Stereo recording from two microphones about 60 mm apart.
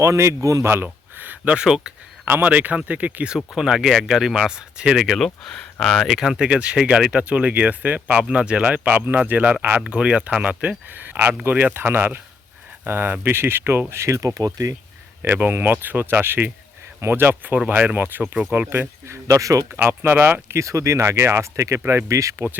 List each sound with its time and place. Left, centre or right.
0.0 s speech: right
0.6 s a sound: right
1.5 s speech: centre
2.2 s speech: right
3.2 s speech: centre
5.1 s speech: centre
6.1 s speech: centre; by 9.8 s right
9.8 s speech: centre
10.9 s speech: right
14.2 s speech: right
15.2 s speech: right
18.7 s speech: right
19.7 s speech: right